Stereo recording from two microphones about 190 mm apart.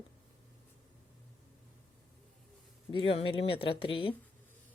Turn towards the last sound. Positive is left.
turn(degrees=25)  # may be behind; listen again after turning